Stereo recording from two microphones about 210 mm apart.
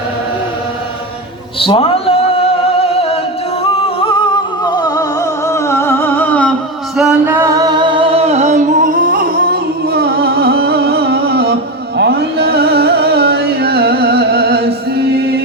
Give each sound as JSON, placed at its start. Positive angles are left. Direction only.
{"t": 1.5, "sound": "a sound", "side_deg": 25}
{"t": 3.6, "sound": "music", "side_deg": 25}
{"t": 6.9, "sound": "music", "side_deg": -5}